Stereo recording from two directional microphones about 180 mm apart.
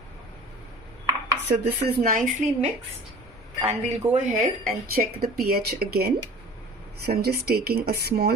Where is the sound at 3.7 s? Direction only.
40° right (ahead or behind).